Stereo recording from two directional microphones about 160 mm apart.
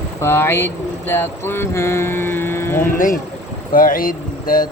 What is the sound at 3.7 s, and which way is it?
Speech, 60° left (ahead or behind).